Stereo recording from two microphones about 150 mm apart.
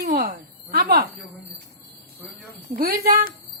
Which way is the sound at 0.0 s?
80° right.